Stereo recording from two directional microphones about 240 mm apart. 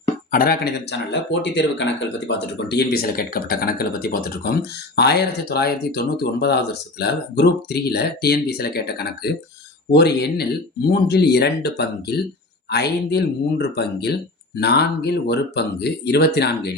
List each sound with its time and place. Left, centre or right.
0.3 s speech: left